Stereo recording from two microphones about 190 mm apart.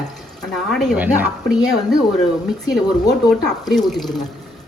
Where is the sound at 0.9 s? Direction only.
10° right (ahead or behind).